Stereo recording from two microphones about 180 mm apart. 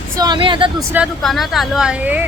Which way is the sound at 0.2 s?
25° right (ahead or behind).